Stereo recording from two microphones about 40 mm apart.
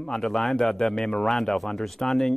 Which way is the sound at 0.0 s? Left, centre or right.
Centre.